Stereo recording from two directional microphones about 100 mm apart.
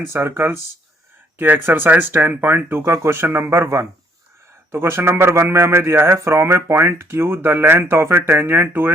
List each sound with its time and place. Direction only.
0.1 s a man's voice: 25° right (ahead or behind)